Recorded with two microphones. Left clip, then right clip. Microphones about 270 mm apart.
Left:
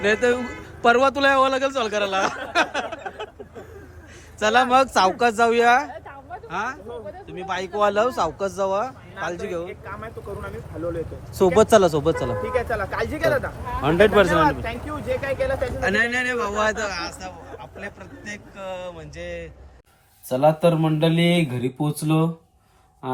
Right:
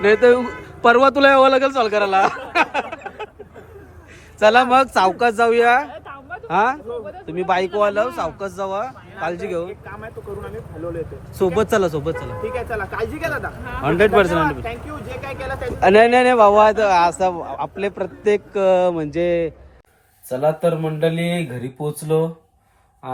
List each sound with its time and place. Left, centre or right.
0.0 s a man's voice: centre
4.4 s speech: centre
11.3 s speech: centre
20.7 s speech: centre